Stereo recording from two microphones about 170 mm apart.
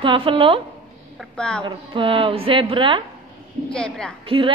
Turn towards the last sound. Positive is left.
turn(degrees=-30)  # may be behind; listen again after turning